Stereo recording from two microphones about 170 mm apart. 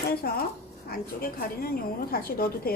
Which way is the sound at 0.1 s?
65° left (ahead or behind).